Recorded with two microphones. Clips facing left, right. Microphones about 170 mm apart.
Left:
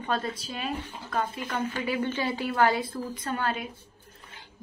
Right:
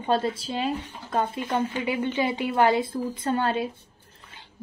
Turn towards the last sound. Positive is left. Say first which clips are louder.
# right 6 dB
turn(degrees=-30)  # may be behind; listen again after turning